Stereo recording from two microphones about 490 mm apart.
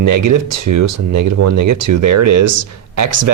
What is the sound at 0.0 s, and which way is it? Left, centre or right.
Speech, right.